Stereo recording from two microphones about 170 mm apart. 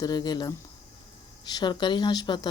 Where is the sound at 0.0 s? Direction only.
25° left (ahead or behind).